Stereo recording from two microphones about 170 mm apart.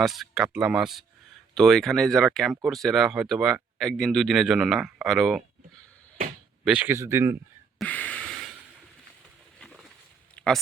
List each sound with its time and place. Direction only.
0.0 s speech: centre (ahead or behind)
6.7 s speech: 10° right (ahead or behind)
7.8 s gasp: 5° left (ahead or behind)
10.3 s a sound: 5° left (ahead or behind)